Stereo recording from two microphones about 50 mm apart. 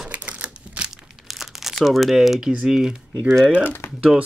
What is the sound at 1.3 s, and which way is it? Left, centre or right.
Crumpling, centre.